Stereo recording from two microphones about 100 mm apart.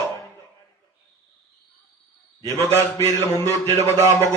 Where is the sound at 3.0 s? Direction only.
35° left (ahead or behind).